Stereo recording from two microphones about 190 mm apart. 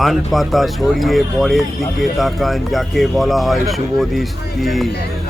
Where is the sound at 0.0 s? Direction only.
Centre (ahead or behind).